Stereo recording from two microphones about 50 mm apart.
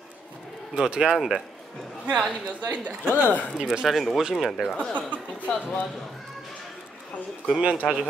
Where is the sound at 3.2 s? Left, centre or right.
Left.